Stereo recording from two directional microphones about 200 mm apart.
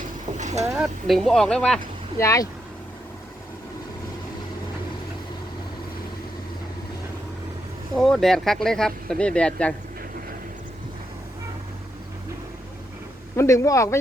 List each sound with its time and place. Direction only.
0.0 s vehicle: 35° right (ahead or behind)
0.8 s speech: centre (ahead or behind)
2.2 s speech: 15° left (ahead or behind)
7.9 s speech: centre (ahead or behind)
13.3 s speech: 15° left (ahead or behind)